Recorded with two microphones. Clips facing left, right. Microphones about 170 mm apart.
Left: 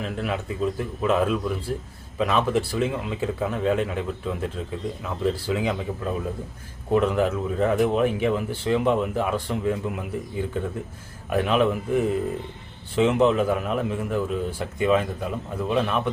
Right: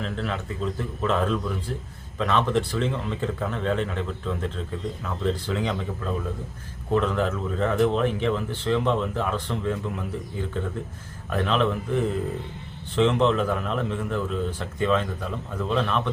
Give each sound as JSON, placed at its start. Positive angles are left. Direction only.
{"t": 0.0, "sound": "a man's voice", "side_deg": 10}
{"t": 6.9, "sound": "a man's voice", "side_deg": 10}
{"t": 11.3, "sound": "a man's voice", "side_deg": 10}